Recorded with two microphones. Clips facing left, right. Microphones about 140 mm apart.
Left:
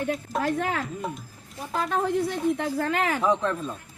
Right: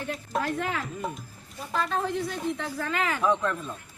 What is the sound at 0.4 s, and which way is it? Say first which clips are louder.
Speech: left 7 dB; 50° left (ahead or behind).